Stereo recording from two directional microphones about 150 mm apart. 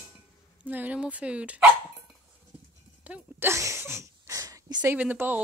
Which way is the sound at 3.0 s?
15° right (ahead or behind).